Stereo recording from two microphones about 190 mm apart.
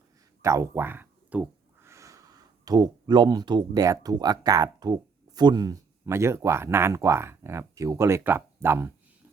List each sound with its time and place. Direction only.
0.4 s speech: 15° right (ahead or behind)